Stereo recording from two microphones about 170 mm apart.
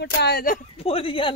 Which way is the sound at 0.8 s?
35° left (ahead or behind).